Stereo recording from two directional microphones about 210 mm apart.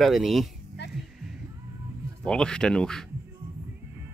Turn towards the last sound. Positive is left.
turn(degrees=5)  # may be behind; listen again after turning